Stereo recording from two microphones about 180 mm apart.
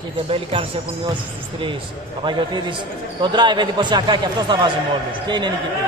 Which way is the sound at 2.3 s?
25° right (ahead or behind).